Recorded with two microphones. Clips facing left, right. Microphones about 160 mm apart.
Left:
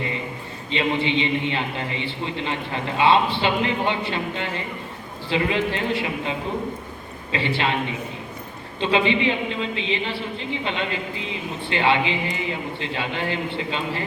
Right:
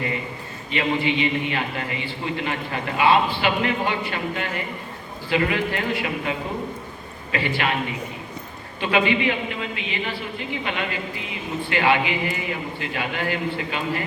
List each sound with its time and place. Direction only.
0.7 s a man's voice: 25° left (ahead or behind)
7.3 s a man's voice: 25° left (ahead or behind)
8.8 s a man's voice: 25° left (ahead or behind)